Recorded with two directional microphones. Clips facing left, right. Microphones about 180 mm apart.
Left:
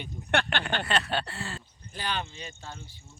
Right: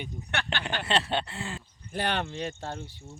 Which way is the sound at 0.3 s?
55° left (ahead or behind).